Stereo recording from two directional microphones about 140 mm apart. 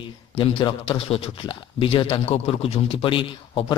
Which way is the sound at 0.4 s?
35° left (ahead or behind).